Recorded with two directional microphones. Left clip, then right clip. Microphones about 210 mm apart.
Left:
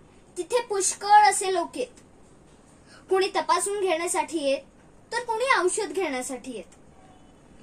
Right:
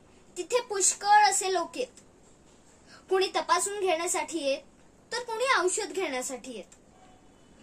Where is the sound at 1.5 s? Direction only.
25° right (ahead or behind).